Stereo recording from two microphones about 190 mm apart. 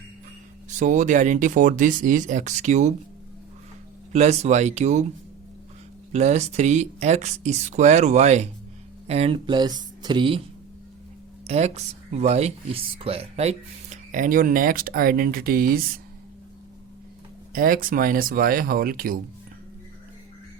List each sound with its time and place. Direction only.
0.7 s speech: 40° right (ahead or behind)
4.1 s speech: 35° right (ahead or behind)
6.1 s speech: 35° right (ahead or behind)
11.4 s speech: 35° right (ahead or behind)
17.5 s speech: 50° right (ahead or behind)